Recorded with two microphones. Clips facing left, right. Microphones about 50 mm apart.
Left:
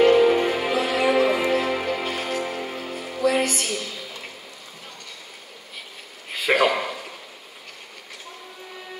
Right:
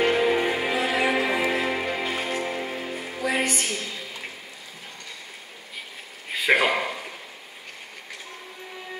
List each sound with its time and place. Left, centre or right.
0.0 s music: centre
3.0 s music: centre
6.5 s a sound: centre